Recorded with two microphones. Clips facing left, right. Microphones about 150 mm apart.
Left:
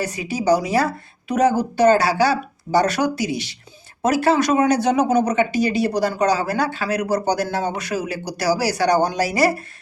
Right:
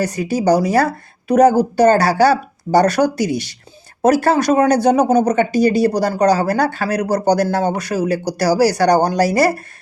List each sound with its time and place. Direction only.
0.0 s speech: 40° right (ahead or behind)